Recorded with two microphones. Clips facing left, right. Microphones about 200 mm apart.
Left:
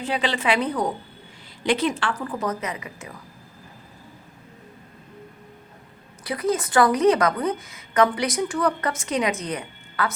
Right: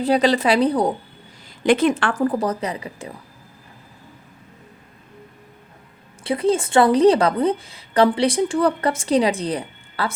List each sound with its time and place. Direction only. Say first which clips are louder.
0.0 s a woman's voice: right 8 dB; 40° right (ahead or behind)
1.6 s a woman's voice: right 6 dB; 50° right (ahead or behind); by 3.2 s 30° right (ahead or behind)
6.2 s a woman's voice: right 5 dB; 30° right (ahead or behind)